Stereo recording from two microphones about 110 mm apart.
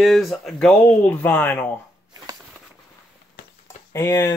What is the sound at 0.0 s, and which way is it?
Speech, centre (ahead or behind).